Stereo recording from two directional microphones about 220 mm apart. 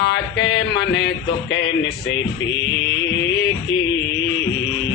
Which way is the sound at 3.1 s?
20° left (ahead or behind).